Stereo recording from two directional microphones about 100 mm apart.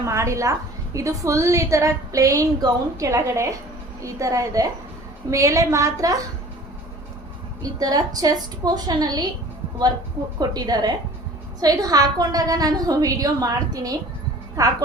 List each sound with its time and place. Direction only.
0.0 s a woman's voice: 30° right (ahead or behind)
7.6 s a woman's voice: 40° right (ahead or behind)
10.5 s a woman's voice: 40° right (ahead or behind)